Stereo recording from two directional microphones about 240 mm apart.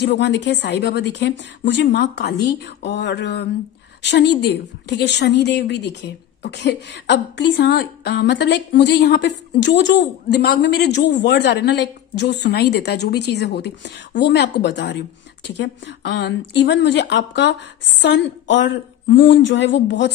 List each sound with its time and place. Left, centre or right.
0.0 s a woman's voice: left